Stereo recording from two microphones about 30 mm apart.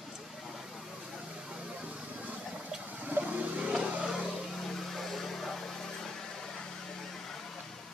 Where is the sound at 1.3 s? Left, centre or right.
Right.